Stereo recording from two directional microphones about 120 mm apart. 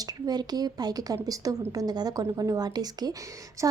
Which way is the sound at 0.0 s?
35° right (ahead or behind).